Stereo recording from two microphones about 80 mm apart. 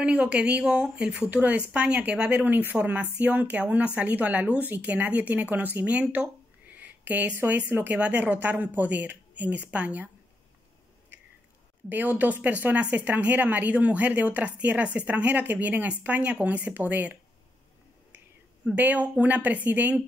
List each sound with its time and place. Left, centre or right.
0.0 s a woman's voice: centre
11.9 s a woman's voice: right
18.8 s a woman's voice: centre